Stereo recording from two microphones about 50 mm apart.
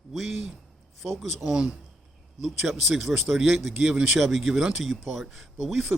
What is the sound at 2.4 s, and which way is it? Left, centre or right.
Speech, centre.